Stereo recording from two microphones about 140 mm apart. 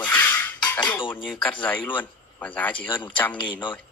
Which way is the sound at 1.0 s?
35° left (ahead or behind).